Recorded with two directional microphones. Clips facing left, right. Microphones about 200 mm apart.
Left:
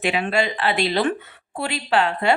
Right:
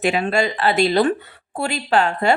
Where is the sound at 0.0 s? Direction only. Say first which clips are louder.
Right 3 dB; 40° right (ahead or behind).